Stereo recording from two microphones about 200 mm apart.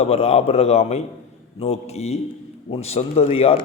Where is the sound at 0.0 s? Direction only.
30° left (ahead or behind).